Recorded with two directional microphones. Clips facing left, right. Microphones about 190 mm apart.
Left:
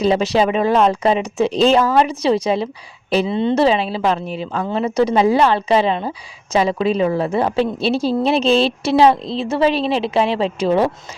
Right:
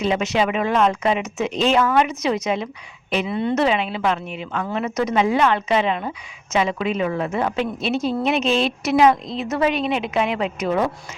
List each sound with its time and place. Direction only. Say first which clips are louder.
0.0 s speech: left 5 dB; 35° left (ahead or behind)